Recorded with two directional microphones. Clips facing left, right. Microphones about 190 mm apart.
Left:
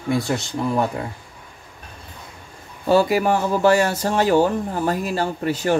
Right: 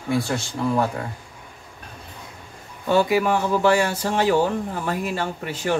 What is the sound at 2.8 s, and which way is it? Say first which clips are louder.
Speech: left 2 dB; 40° left (ahead or behind).